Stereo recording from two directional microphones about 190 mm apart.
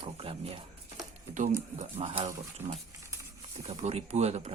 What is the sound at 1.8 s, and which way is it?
Speech, 30° right (ahead or behind).